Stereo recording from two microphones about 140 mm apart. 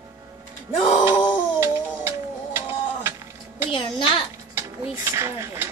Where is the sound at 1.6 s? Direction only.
15° right (ahead or behind).